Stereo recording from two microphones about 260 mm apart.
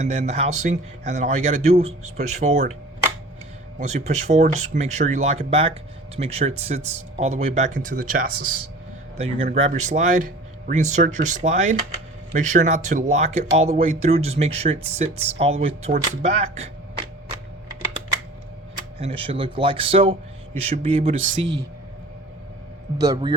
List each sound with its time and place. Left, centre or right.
0.0 s speech: right
3.8 s speech: right
18.9 s speech: right
21.2 s speech: right
23.0 s speech: centre